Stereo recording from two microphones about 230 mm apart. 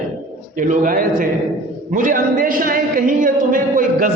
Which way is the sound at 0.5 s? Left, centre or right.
Right.